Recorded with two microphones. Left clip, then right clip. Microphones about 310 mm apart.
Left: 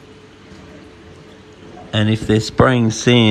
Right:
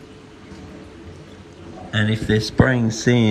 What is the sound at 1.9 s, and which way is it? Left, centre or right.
Speech, centre.